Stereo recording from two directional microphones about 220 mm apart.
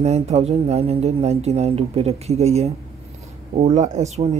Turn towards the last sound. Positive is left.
turn(degrees=-30)  # may be behind; listen again after turning